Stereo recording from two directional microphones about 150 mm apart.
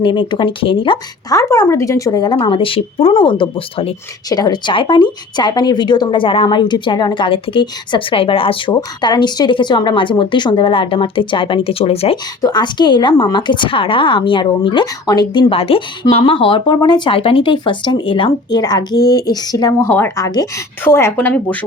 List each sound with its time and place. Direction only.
0.0 s speech: 35° left (ahead or behind)
1.3 s speech: 20° left (ahead or behind); by 3.9 s 40° left (ahead or behind)
4.3 s speech: 25° left (ahead or behind)
12.4 s speech: 30° left (ahead or behind)
19.9 s a woman's voice: 15° left (ahead or behind)